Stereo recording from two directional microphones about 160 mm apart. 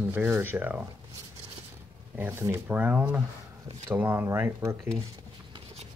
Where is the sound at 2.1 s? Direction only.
15° right (ahead or behind).